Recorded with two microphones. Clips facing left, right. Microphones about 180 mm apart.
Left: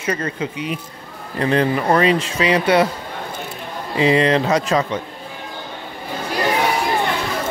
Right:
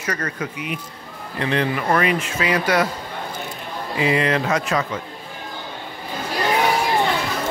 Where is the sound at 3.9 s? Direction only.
30° left (ahead or behind).